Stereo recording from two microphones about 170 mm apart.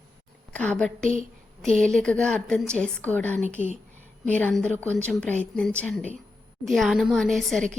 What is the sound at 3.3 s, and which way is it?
Speech, 45° right (ahead or behind).